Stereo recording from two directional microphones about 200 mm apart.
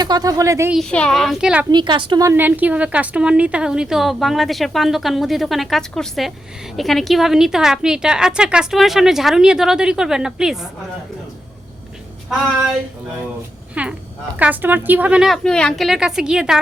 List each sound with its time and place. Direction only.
0.0 s a woman's voice: 20° right (ahead or behind)
0.7 s a woman's voice: centre (ahead or behind)
1.7 s a woman's voice: 20° right (ahead or behind); by 10.7 s 5° right (ahead or behind)
13.8 s a woman's voice: 5° right (ahead or behind)